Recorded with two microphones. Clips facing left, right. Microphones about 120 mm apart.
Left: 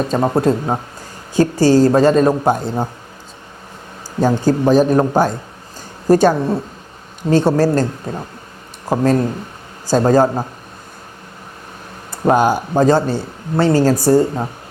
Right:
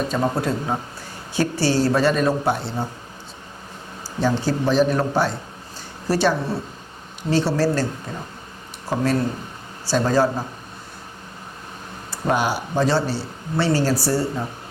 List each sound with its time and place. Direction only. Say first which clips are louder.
0.1 s speech: left 7 dB; 40° left (ahead or behind)
4.2 s speech: left 6 dB; 45° left (ahead or behind)
9.9 s speech: left 6 dB; 45° left (ahead or behind)
12.1 s speech: left 8 dB; 45° left (ahead or behind)